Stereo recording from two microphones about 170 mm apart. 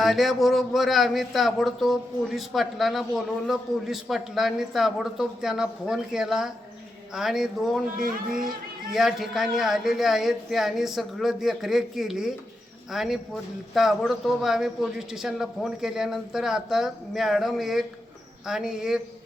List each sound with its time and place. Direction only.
0.0 s a man's voice: centre (ahead or behind)
7.9 s speech: 55° right (ahead or behind)
8.9 s a man's voice: centre (ahead or behind)